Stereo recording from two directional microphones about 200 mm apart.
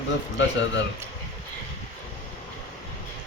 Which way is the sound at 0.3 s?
65° left (ahead or behind).